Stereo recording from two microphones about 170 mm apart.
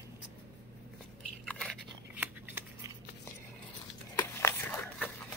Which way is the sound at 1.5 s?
5° left (ahead or behind).